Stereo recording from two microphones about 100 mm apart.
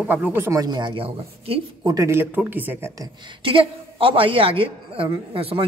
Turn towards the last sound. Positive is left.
turn(degrees=-70)  # may be behind; listen again after turning